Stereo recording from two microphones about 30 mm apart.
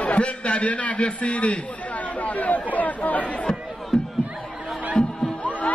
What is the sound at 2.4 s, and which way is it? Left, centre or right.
Speech, left.